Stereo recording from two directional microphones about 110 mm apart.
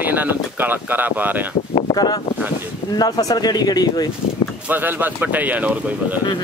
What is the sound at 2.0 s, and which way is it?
Speech, 35° left (ahead or behind).